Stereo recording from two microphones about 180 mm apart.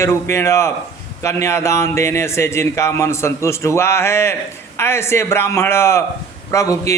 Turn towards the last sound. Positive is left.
turn(degrees=15)  # may be behind; listen again after turning